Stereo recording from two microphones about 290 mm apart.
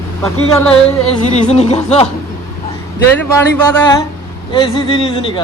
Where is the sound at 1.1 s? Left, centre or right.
Left.